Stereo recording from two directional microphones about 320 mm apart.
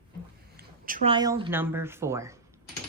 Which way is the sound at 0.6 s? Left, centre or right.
Right.